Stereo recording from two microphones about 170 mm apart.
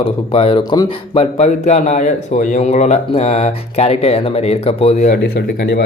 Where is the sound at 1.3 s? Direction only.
40° left (ahead or behind).